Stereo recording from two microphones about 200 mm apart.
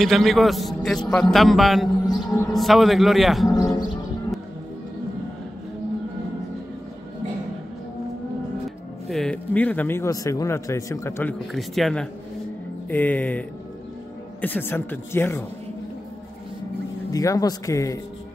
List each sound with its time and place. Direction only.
0.0 s a man's voice: centre (ahead or behind)
2.0 s a sound: 15° left (ahead or behind)
2.5 s a man's voice: centre (ahead or behind)
3.4 s a sound: 15° left (ahead or behind)
9.1 s speech: 5° left (ahead or behind)
11.5 s a man's voice: centre (ahead or behind)
17.1 s speech: 15° left (ahead or behind)